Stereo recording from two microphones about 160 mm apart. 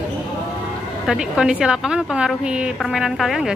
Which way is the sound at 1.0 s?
5° right (ahead or behind).